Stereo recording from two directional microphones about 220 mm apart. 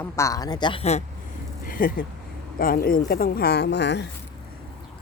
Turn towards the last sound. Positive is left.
turn(degrees=50)  # may be behind; listen again after turning